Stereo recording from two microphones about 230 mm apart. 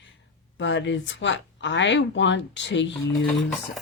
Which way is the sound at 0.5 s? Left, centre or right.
Left.